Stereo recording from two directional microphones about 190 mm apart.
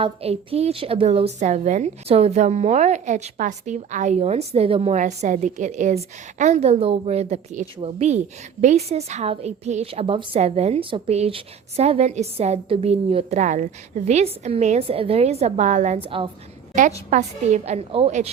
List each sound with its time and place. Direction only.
0.0 s a woman's voice: 30° right (ahead or behind)
17.1 s a woman's voice: 40° right (ahead or behind)